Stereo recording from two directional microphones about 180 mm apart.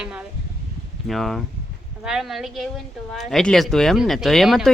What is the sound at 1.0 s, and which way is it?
A woman's voice, centre (ahead or behind).